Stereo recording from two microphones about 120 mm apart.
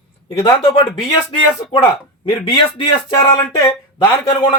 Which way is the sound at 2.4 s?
50° left (ahead or behind).